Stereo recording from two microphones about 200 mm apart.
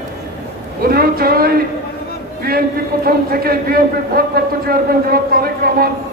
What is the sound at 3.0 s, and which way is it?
A man's voice, 50° right (ahead or behind).